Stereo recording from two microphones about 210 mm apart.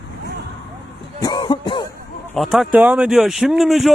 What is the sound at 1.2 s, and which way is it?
Cough, 20° left (ahead or behind).